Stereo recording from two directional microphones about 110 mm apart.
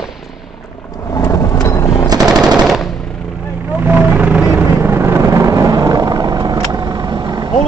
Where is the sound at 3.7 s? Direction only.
15° right (ahead or behind); by 7.5 s 35° right (ahead or behind).